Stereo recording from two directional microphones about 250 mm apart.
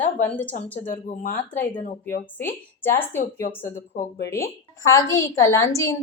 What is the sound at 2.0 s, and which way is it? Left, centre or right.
A woman's voice, centre.